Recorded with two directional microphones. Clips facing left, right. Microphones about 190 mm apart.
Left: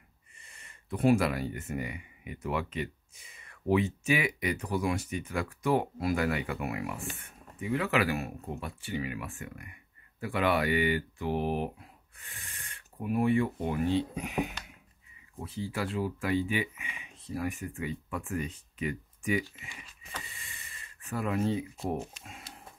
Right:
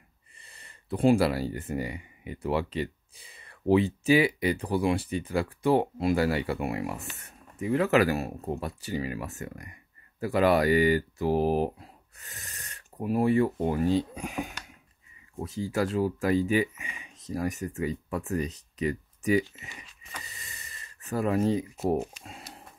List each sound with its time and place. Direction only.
0.4 s speech: 35° right (ahead or behind)